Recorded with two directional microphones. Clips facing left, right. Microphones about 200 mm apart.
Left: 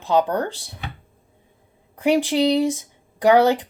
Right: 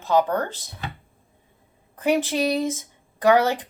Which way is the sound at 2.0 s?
15° left (ahead or behind).